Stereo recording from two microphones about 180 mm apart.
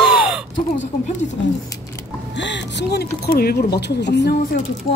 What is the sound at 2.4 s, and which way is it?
Speech, 75° left (ahead or behind).